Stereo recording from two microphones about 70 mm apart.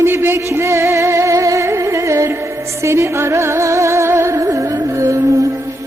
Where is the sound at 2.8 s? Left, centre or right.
Right.